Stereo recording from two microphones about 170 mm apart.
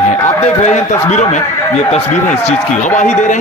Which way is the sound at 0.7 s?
45° left (ahead or behind).